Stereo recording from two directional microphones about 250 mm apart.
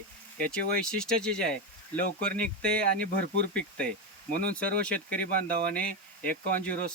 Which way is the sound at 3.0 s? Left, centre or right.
Right.